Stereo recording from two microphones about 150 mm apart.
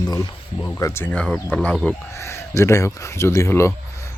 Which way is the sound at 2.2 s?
20° left (ahead or behind).